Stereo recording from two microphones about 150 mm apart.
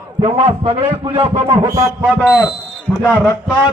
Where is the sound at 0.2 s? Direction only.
35° right (ahead or behind).